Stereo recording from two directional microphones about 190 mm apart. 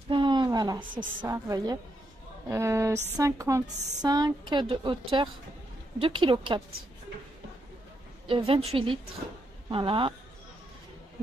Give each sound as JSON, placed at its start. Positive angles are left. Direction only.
{"t": 0.1, "sound": "a woman's voice", "side_deg": -25}
{"t": 8.3, "sound": "a woman's voice", "side_deg": -30}